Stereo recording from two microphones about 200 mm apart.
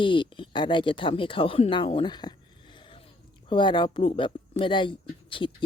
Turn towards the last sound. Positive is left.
turn(degrees=25)  # may be behind; listen again after turning